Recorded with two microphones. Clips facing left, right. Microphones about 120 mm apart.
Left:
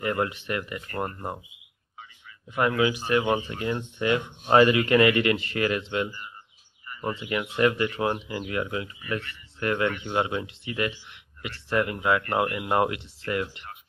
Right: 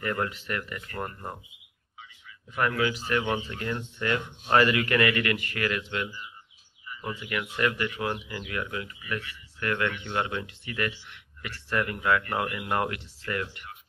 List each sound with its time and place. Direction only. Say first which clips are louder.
0.0 s speech: left 3 dB; 20° left (ahead or behind)
0.8 s speech: left 4 dB; 40° left (ahead or behind)
2.5 s speech: left 3 dB; 20° left (ahead or behind)
6.0 s speech: left 3 dB; 50° left (ahead or behind)
6.9 s bird: left 5 dB; 50° left (ahead or behind)
7.2 s speech: left 5 dB; 25° left (ahead or behind)